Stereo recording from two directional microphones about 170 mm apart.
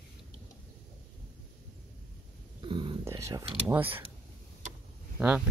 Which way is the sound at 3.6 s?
10° right (ahead or behind).